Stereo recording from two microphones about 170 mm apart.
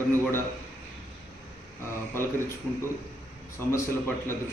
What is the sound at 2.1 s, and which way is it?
Speech, 15° left (ahead or behind).